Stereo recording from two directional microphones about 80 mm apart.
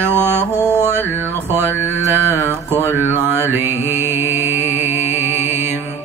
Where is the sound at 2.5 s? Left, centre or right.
Right.